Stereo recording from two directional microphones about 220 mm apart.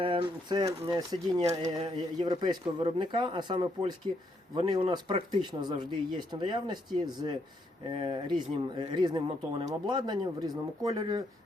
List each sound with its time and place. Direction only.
0.0 s speech: 25° right (ahead or behind)